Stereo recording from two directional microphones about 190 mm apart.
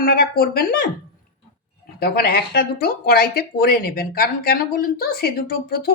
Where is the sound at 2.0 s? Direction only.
55° left (ahead or behind).